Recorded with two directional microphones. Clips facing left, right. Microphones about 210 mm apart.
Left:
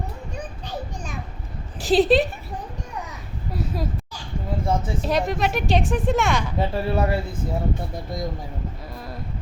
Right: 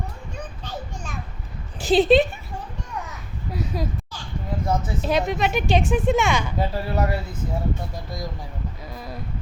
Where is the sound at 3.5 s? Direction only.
Centre (ahead or behind).